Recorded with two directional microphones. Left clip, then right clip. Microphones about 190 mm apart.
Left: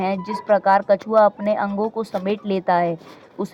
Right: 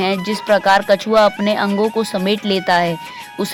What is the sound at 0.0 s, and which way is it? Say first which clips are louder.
Speech: right 5 dB; 25° right (ahead or behind).